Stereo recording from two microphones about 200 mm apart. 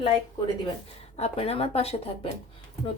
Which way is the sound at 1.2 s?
30° left (ahead or behind).